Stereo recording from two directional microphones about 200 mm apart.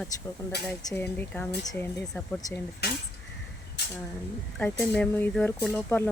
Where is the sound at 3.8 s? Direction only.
55° left (ahead or behind).